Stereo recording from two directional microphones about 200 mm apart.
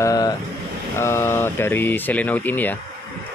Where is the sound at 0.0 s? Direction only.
20° left (ahead or behind).